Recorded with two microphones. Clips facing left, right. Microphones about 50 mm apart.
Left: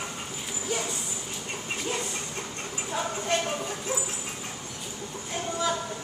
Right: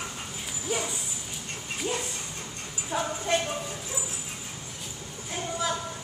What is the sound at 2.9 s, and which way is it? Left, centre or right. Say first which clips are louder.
Clip-clop: right 2 dB; centre.